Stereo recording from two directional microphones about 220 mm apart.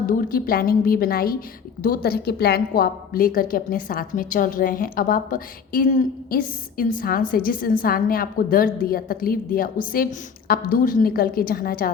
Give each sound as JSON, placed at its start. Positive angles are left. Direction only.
{"t": 0.0, "sound": "a woman's voice", "side_deg": 40}